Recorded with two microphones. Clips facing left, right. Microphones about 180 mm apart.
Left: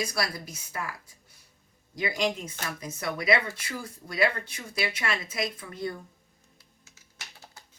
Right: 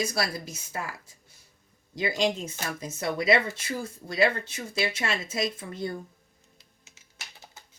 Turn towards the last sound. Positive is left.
turn(degrees=-20)  # may be behind; listen again after turning